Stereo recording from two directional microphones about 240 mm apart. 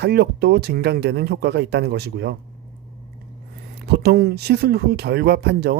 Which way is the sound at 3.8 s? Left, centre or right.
Right.